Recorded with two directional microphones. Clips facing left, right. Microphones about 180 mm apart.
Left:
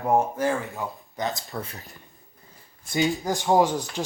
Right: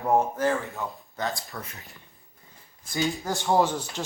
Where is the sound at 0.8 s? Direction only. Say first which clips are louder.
Left 1 dB; centre (ahead or behind).